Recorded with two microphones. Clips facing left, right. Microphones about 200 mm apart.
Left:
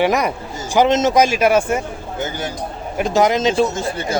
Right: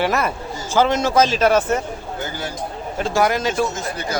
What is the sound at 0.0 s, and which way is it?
Speech, 15° left (ahead or behind).